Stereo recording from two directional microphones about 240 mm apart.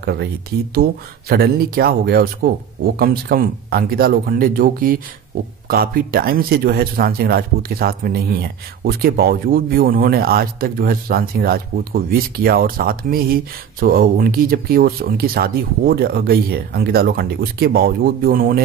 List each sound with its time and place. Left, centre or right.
0.0 s speech: right
1.3 s speech: right